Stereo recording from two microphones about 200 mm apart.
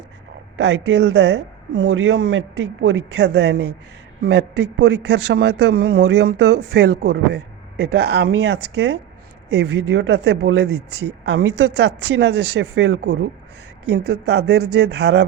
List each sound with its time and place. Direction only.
0.5 s speech: 70° right (ahead or behind)